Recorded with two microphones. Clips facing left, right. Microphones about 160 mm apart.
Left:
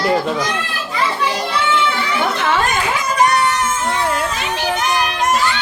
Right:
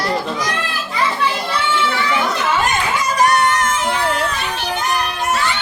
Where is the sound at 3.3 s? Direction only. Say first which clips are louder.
Right 1 dB; 55° right (ahead or behind).